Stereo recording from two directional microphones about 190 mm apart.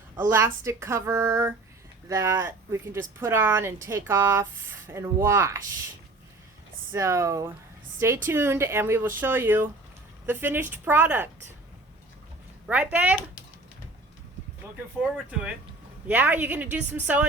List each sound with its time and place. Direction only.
0.2 s speech: 15° right (ahead or behind)
6.9 s speech: 15° right (ahead or behind)
12.6 s speech: 5° right (ahead or behind)
15.0 s speech: 5° right (ahead or behind)